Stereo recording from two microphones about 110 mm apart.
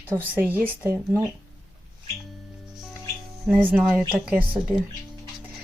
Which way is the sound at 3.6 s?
15° right (ahead or behind).